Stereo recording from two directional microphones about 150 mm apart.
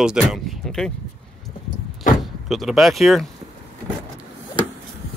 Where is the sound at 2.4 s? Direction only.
Centre (ahead or behind).